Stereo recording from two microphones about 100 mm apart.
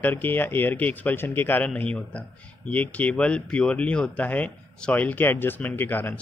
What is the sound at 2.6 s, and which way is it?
Speech, 15° left (ahead or behind).